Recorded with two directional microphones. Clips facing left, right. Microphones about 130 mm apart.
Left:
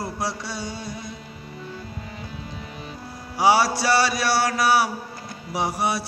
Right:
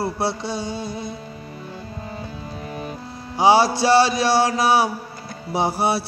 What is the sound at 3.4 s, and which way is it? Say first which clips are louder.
Mantra: right 3 dB; 25° right (ahead or behind).